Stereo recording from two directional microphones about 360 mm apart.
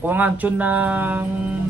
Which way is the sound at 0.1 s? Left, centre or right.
Centre.